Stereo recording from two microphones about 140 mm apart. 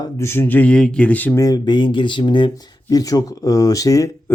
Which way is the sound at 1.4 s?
30° left (ahead or behind).